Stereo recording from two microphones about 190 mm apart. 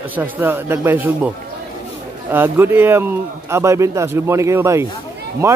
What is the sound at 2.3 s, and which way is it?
Speech, 10° right (ahead or behind).